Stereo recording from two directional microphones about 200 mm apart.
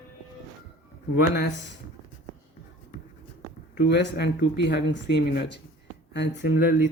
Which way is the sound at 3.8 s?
55° left (ahead or behind).